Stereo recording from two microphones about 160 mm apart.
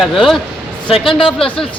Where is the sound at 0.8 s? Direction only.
35° left (ahead or behind).